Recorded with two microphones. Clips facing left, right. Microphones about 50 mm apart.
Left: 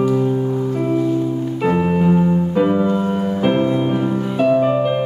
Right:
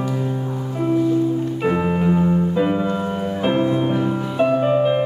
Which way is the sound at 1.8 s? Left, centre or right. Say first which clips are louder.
Left 3 dB; centre.